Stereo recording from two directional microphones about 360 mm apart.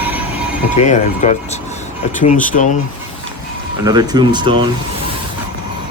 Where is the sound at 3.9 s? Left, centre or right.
Centre.